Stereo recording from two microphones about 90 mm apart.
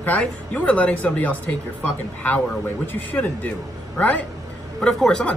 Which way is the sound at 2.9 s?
20° left (ahead or behind).